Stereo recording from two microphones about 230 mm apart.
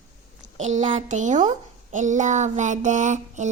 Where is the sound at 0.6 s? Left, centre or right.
Right.